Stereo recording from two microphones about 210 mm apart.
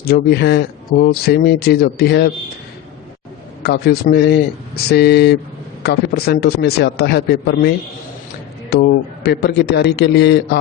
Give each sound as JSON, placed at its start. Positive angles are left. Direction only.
{"t": 0.0, "sound": "speech", "side_deg": 50}
{"t": 3.6, "sound": "speech", "side_deg": 50}
{"t": 8.7, "sound": "speech", "side_deg": 50}